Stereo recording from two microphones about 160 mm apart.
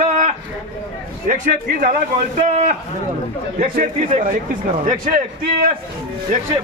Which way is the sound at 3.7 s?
55° right (ahead or behind).